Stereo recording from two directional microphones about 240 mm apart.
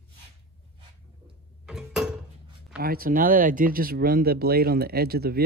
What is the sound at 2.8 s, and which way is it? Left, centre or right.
Speech, right.